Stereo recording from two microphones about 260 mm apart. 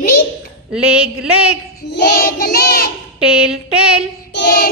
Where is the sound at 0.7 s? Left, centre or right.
Centre.